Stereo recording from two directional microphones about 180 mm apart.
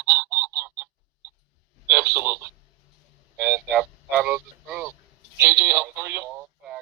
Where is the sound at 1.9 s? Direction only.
60° right (ahead or behind).